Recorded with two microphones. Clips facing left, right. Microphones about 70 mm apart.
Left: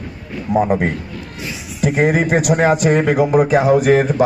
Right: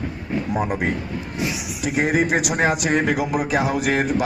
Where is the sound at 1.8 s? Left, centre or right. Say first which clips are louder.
Left 5 dB; left.